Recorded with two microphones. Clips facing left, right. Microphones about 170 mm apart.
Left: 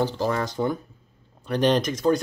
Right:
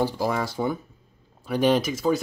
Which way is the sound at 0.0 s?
10° right (ahead or behind).